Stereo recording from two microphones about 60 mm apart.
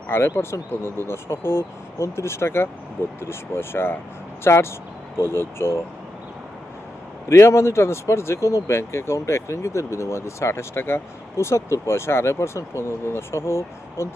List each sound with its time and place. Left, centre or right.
0.1 s speech: left
7.3 s speech: left